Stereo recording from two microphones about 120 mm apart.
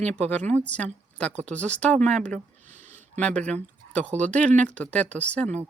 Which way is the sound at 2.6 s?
90° right.